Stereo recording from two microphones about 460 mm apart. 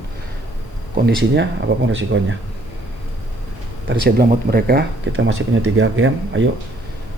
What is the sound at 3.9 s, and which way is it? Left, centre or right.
Speech, centre.